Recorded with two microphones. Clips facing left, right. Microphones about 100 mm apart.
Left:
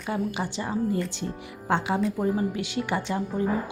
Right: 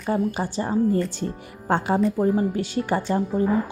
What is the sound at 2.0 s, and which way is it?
Speech, centre (ahead or behind).